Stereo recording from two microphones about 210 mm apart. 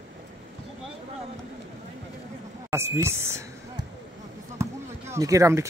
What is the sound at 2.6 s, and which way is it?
Speech, 10° right (ahead or behind).